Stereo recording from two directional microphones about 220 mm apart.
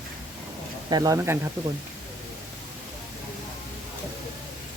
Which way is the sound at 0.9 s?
15° right (ahead or behind).